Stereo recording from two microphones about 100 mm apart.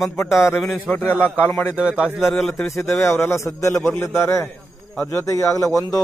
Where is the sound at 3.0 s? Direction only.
25° left (ahead or behind).